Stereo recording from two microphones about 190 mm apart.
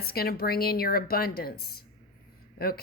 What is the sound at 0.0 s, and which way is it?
A woman's voice, 55° left (ahead or behind).